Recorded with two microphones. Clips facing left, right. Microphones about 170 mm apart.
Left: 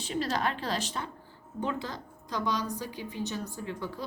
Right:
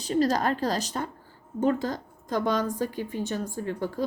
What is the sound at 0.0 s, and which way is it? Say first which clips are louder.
A woman's voice: right 6 dB; 40° right (ahead or behind).